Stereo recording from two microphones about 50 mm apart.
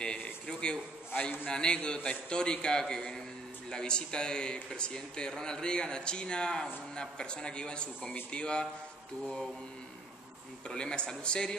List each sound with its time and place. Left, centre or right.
0.5 s a sound: centre
1.5 s speech: centre
10.7 s speech: centre